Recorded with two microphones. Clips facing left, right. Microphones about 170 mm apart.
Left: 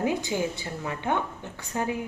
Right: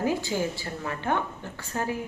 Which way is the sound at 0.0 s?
20° left (ahead or behind).